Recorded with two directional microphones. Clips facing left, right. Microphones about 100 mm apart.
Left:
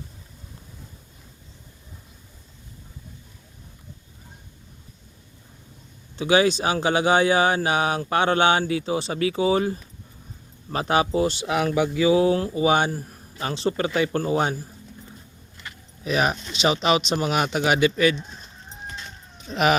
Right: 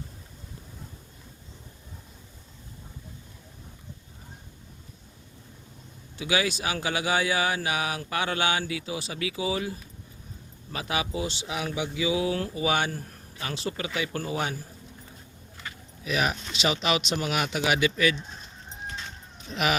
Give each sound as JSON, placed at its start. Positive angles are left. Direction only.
{"t": 6.1, "sound": "speech", "side_deg": 35}
{"t": 12.4, "sound": "speech", "side_deg": 25}
{"t": 12.9, "sound": "speech", "side_deg": 15}
{"t": 13.4, "sound": "speech", "side_deg": 30}
{"t": 16.0, "sound": "speech", "side_deg": 35}